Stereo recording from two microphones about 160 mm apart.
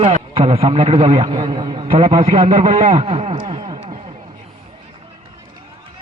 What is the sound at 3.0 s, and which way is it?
Speech, 40° right (ahead or behind).